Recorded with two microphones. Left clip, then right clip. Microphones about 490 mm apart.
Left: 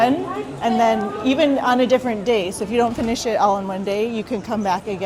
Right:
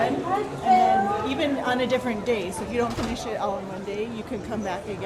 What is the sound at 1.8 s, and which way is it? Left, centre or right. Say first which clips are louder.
Speech: left 7 dB; centre.